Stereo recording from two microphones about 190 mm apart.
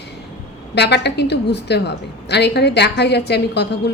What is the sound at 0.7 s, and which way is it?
A woman's voice, 60° left (ahead or behind).